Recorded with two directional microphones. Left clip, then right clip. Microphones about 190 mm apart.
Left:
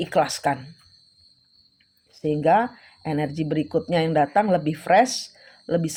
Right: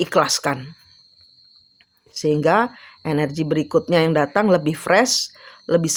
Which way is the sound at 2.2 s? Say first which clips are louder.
Right 2 dB; 30° right (ahead or behind).